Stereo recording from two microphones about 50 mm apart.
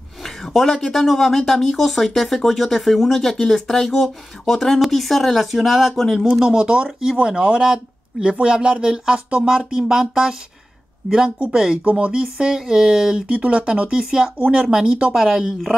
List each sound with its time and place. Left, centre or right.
0.2 s speech: centre
6.3 s speech: centre
11.8 s speech: right
13.3 s speech: right
15.1 s speech: centre